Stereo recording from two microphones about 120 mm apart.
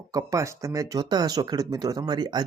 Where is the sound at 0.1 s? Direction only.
30° right (ahead or behind).